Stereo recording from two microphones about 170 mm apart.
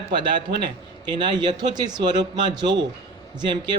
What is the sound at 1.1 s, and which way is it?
Speech, 25° right (ahead or behind).